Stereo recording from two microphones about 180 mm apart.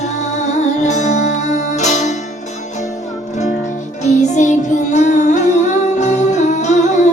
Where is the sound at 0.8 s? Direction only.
40° left (ahead or behind).